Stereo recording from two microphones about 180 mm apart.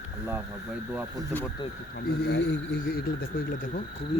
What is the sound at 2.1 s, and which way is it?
Speech, 70° left (ahead or behind).